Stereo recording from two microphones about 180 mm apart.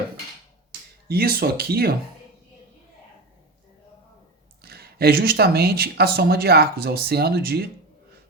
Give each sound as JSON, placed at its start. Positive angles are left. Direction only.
{"t": 1.0, "sound": "speech", "side_deg": -60}
{"t": 4.6, "sound": "speech", "side_deg": -60}